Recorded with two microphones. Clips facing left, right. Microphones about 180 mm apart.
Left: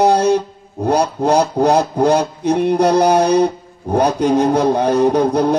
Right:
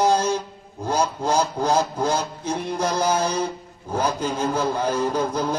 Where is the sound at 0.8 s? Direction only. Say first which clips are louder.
Left 8 dB; 65° left (ahead or behind).